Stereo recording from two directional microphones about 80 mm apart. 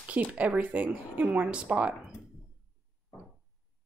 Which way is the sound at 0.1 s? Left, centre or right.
Centre.